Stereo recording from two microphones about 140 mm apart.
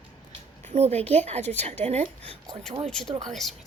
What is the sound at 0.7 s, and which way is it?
A woman's voice, 45° right (ahead or behind).